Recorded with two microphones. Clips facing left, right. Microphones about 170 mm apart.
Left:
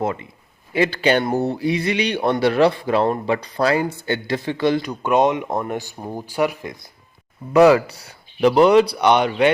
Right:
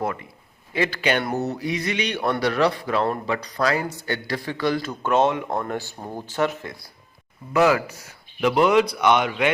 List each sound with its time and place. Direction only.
0.0 s speech: 25° left (ahead or behind)
7.5 s speech: 35° left (ahead or behind)